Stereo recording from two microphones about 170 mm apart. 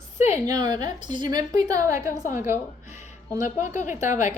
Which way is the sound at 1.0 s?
45° left (ahead or behind).